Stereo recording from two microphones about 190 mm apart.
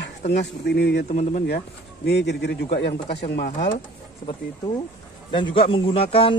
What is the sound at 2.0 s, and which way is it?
A man's voice, 65° left (ahead or behind).